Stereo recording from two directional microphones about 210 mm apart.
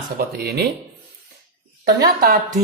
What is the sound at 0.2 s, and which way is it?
Speech, 50° right (ahead or behind).